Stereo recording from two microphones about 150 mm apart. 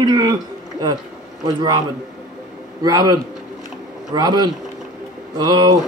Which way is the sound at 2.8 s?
25° right (ahead or behind).